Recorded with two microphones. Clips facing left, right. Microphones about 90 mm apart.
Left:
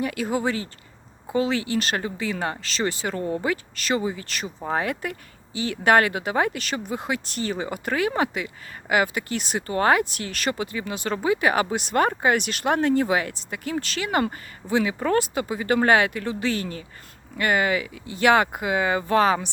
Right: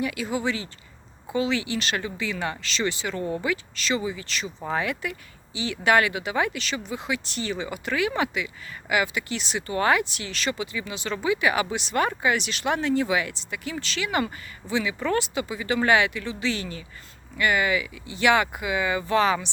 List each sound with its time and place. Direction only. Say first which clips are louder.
0.0 s speech: left 2 dB; 45° left (ahead or behind)